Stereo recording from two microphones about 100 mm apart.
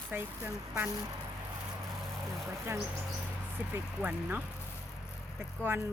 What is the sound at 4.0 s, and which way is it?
Speech, 15° right (ahead or behind).